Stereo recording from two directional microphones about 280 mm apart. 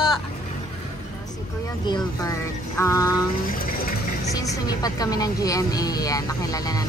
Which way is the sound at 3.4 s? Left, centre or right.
Left.